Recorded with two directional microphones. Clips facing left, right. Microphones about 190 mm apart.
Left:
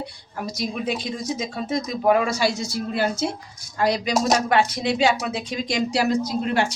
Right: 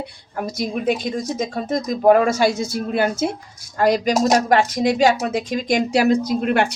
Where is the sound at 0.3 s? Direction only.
50° right (ahead or behind).